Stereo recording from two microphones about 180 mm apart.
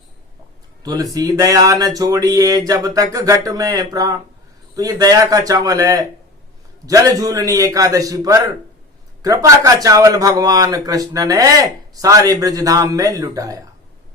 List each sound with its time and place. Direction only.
0.8 s speech: 20° right (ahead or behind)